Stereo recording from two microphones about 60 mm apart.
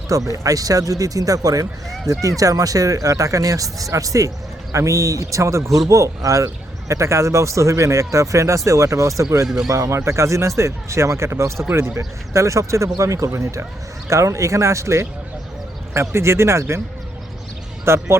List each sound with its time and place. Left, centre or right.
0.1 s a man's voice: right
13.3 s a man's voice: right
17.8 s speech: right